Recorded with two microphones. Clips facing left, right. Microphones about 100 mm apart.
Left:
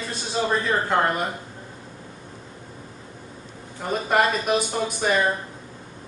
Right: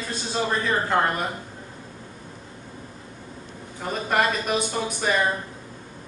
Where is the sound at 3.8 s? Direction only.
5° left (ahead or behind).